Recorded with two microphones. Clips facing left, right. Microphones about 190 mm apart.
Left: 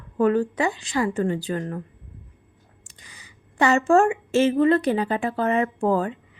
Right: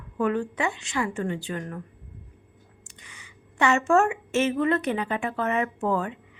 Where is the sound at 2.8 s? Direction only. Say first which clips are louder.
Left 1 dB; 35° left (ahead or behind).